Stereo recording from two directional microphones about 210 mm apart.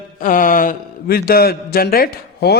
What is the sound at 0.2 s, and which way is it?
A man's voice, 40° left (ahead or behind).